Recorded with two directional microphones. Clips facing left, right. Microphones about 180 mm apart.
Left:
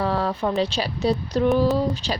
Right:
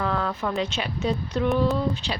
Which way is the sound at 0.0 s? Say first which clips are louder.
Left 3 dB; 30° left (ahead or behind).